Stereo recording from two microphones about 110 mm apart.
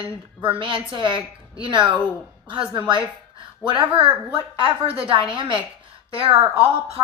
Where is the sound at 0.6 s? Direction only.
50° right (ahead or behind).